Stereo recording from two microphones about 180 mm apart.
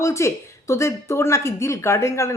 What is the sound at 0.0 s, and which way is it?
Speech, 15° left (ahead or behind).